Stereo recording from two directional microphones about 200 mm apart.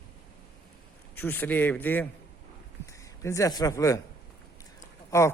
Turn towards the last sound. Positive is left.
turn(degrees=15)  # may be behind; listen again after turning